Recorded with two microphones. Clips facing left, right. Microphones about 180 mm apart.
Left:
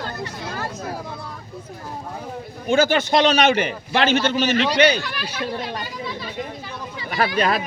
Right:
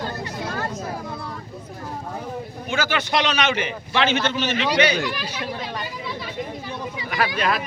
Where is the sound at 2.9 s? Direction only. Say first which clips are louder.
Left 5 dB; 40° left (ahead or behind).